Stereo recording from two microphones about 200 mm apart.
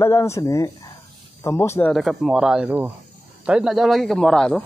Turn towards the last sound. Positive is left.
turn(degrees=5)  # may be behind; listen again after turning